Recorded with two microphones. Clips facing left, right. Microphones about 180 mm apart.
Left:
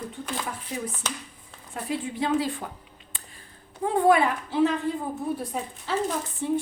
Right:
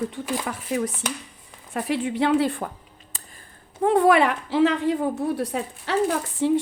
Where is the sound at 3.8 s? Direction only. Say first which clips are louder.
Right 3 dB; 75° right (ahead or behind).